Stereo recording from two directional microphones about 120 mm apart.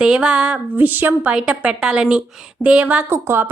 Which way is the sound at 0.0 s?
10° right (ahead or behind).